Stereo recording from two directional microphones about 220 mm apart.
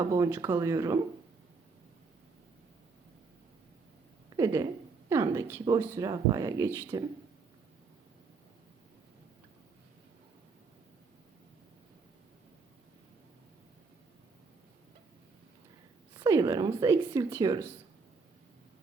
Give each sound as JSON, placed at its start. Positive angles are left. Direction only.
{"t": 0.0, "sound": "a woman's voice", "side_deg": -15}
{"t": 4.4, "sound": "a woman's voice", "side_deg": -15}
{"t": 16.2, "sound": "a woman's voice", "side_deg": -15}